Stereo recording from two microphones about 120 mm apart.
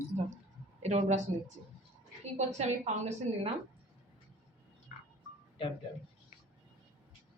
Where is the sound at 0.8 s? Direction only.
75° right (ahead or behind).